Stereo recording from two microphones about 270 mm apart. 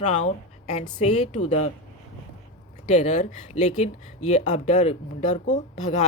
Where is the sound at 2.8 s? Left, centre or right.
Left.